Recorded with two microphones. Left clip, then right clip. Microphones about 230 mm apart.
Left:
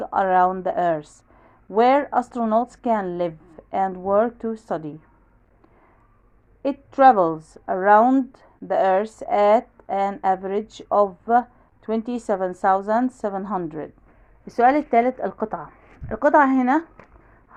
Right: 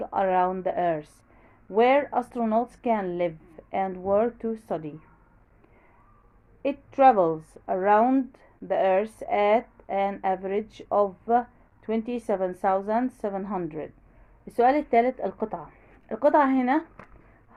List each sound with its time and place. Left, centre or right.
0.0 s a woman's voice: left
6.6 s a woman's voice: left